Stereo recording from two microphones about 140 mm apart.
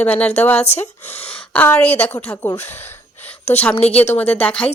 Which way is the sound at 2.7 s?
15° left (ahead or behind).